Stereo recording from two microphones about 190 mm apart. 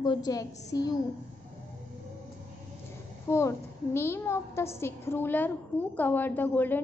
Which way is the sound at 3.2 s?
15° left (ahead or behind).